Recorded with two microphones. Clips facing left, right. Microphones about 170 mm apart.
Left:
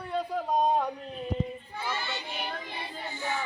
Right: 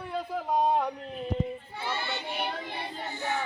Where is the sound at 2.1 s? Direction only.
60° right (ahead or behind).